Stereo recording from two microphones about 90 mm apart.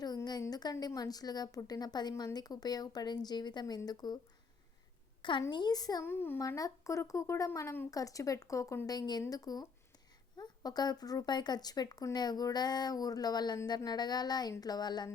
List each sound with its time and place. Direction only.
0.5 s a woman's voice: 45° left (ahead or behind)
5.5 s a woman's voice: 55° left (ahead or behind)
6.0 s a woman's voice: 25° left (ahead or behind)
6.6 s speech: 35° left (ahead or behind)
8.9 s a woman's voice: 50° left (ahead or behind)